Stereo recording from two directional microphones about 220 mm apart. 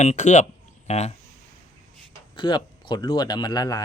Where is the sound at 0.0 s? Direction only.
35° left (ahead or behind).